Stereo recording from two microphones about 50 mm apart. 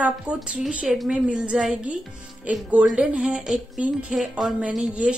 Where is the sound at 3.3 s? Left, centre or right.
Centre.